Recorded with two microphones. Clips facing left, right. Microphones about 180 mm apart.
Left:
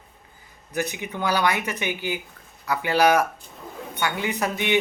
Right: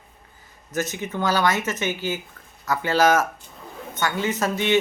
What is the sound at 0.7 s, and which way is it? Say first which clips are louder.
A woman's voice: right 1 dB; 15° left (ahead or behind).